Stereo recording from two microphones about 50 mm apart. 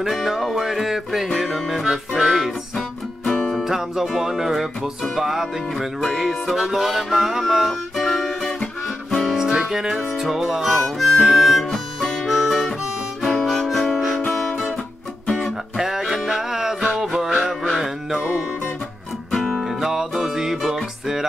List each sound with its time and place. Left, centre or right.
0.0 s music: centre
8.8 s music: centre
11.2 s harmonica: centre
13.9 s music: centre
14.2 s guitar: left
15.7 s music: centre
19.3 s music: centre
19.6 s music: centre